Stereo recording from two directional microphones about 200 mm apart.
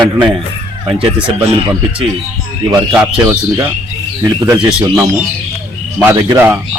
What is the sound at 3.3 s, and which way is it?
Speech, 10° right (ahead or behind).